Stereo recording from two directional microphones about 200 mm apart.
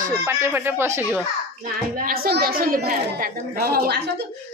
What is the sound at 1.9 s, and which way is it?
A woman's voice, 45° right (ahead or behind).